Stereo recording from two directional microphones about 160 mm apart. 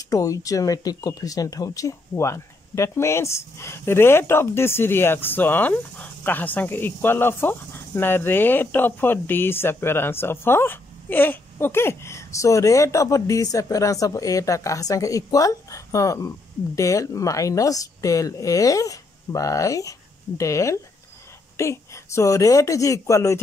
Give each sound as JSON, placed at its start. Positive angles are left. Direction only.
{"t": 0.1, "sound": "speech", "side_deg": 20}